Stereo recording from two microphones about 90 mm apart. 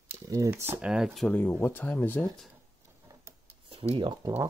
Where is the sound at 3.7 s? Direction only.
90° right.